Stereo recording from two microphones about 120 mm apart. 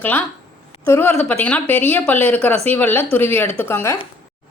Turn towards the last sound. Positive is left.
turn(degrees=20)  # may be behind; listen again after turning